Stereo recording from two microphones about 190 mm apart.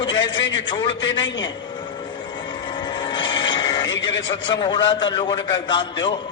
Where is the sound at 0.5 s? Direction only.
25° left (ahead or behind).